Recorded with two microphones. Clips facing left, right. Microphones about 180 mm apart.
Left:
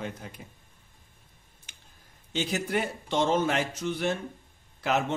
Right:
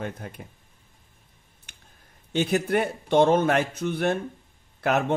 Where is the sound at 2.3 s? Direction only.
60° right (ahead or behind).